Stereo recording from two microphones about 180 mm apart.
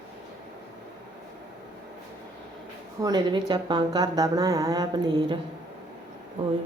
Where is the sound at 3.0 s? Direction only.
25° right (ahead or behind).